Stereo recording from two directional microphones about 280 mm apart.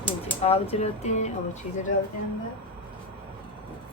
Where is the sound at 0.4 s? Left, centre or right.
Left.